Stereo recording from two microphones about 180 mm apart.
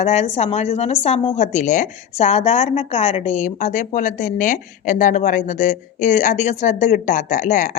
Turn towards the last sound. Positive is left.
turn(degrees=45)  # may be behind; listen again after turning